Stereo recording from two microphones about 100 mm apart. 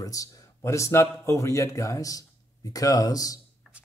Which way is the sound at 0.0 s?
35° left (ahead or behind).